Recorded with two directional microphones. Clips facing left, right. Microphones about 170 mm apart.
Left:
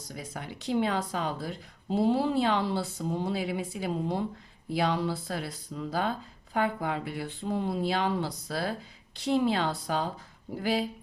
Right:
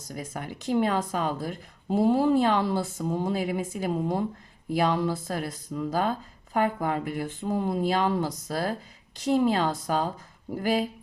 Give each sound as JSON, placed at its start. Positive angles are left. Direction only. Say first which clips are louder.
{"t": 0.0, "sound": "speech", "louder": "right 4 dB", "side_deg": -45}